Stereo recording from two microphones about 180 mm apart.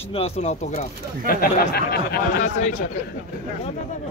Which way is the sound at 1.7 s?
60° left (ahead or behind).